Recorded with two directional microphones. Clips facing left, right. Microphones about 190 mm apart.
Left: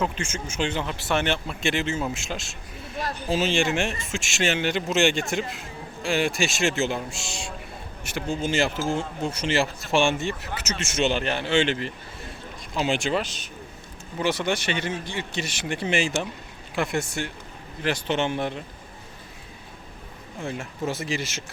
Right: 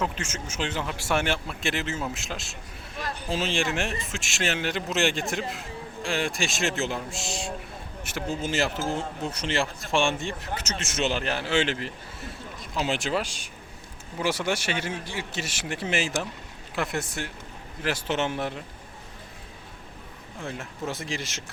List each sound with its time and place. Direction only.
0.0 s a man's voice: centre (ahead or behind)
20.4 s a man's voice: centre (ahead or behind)